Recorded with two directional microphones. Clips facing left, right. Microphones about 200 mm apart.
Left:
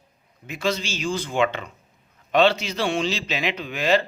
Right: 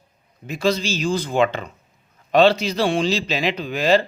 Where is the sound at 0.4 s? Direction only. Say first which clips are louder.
Right 5 dB; 35° right (ahead or behind).